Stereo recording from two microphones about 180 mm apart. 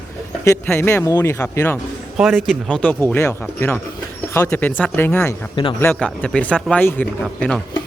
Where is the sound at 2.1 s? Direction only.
Centre (ahead or behind).